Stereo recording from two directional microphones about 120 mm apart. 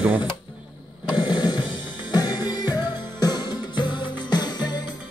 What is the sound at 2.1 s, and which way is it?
Music, 35° left (ahead or behind).